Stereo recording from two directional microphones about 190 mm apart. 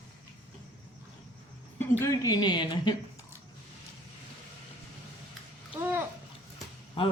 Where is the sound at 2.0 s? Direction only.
20° left (ahead or behind).